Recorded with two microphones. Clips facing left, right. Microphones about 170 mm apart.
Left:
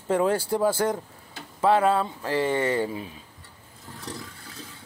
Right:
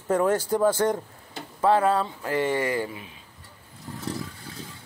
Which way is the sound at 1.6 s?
20° left (ahead or behind).